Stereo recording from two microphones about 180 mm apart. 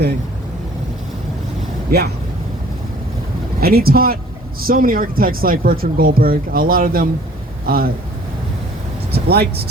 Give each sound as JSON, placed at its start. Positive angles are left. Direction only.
{"t": 3.6, "sound": "speech", "side_deg": -55}
{"t": 9.1, "sound": "speech", "side_deg": -60}